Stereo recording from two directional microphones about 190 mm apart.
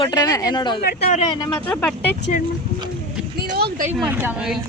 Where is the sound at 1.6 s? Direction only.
5° left (ahead or behind).